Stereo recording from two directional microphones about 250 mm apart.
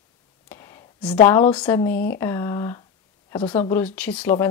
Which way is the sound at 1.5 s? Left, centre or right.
Centre.